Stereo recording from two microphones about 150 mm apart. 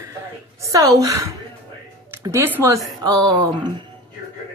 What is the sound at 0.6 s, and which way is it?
Speech, 20° right (ahead or behind).